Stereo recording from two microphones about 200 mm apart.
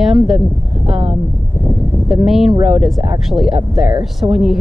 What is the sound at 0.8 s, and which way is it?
Speech, 30° right (ahead or behind).